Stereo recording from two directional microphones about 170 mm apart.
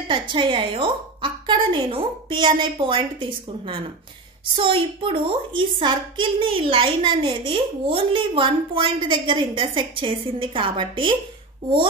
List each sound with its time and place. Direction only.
0.1 s a woman's voice: 30° right (ahead or behind)